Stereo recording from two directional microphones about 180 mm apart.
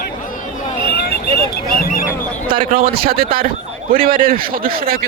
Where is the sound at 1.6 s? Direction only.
50° left (ahead or behind).